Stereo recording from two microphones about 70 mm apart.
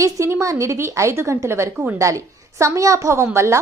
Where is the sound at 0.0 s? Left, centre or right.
Right.